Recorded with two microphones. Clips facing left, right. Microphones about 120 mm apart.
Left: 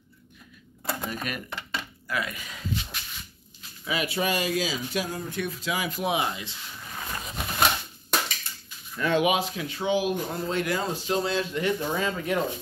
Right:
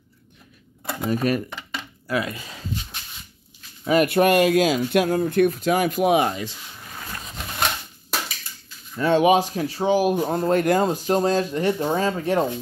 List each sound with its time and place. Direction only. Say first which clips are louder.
1.0 s speech: right 11 dB; 35° right (ahead or behind)
3.8 s speech: right 10 dB; 50° right (ahead or behind)
8.9 s speech: right 6 dB; 30° right (ahead or behind)